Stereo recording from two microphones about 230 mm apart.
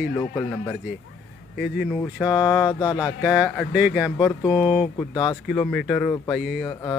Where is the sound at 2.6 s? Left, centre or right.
Centre.